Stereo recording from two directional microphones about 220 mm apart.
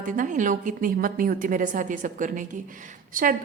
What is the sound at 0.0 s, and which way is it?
A woman's voice, 35° right (ahead or behind).